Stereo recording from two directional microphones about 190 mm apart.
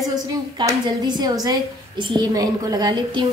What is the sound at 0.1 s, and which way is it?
A woman's voice, 20° right (ahead or behind).